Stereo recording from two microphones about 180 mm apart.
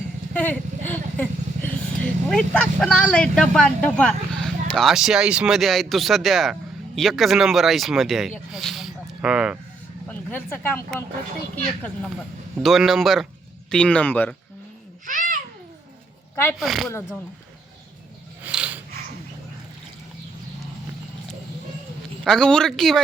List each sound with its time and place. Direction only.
0.3 s vehicle: 10° left (ahead or behind)
2.3 s speech: 5° left (ahead or behind)
10.1 s speech: 10° left (ahead or behind)
12.6 s speech: centre (ahead or behind)
15.0 s babbling: 45° right (ahead or behind)
16.3 s speech: 15° left (ahead or behind)
16.6 s speech: centre (ahead or behind)
18.4 s dog: 10° right (ahead or behind)
22.2 s speech: 5° left (ahead or behind)